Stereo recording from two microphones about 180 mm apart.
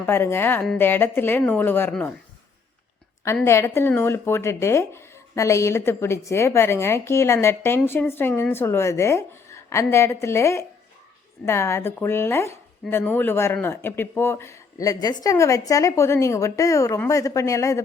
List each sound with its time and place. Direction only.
0.0 s speech: 15° left (ahead or behind)
3.4 s speech: 15° left (ahead or behind)